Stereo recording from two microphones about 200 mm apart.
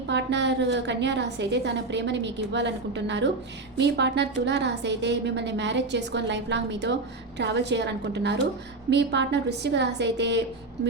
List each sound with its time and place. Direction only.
0.1 s a woman's voice: 60° right (ahead or behind)